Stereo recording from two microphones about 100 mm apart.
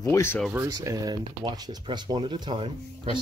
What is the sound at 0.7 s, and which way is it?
Speech, 35° right (ahead or behind).